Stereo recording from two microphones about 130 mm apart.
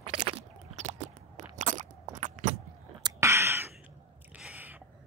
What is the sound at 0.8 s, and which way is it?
Crunch, 70° right (ahead or behind).